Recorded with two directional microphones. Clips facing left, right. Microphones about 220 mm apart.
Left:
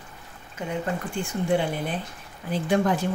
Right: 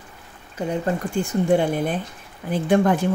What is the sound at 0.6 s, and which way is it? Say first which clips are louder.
Speech: right 5 dB; 40° right (ahead or behind).